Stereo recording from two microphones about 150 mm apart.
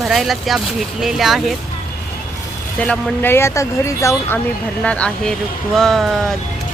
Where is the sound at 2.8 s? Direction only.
10° left (ahead or behind).